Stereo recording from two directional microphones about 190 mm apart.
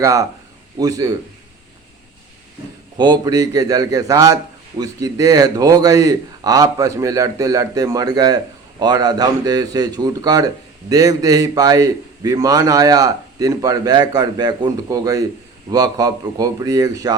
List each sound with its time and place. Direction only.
0.0 s a man's voice: 15° right (ahead or behind)
3.0 s a man's voice: 20° right (ahead or behind)